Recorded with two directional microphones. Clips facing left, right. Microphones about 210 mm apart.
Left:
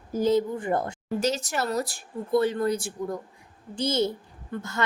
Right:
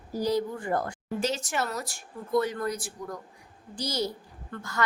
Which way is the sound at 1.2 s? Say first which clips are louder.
Left 3 dB; 40° left (ahead or behind).